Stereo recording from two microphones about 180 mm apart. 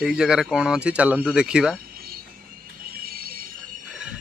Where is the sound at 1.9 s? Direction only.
55° right (ahead or behind).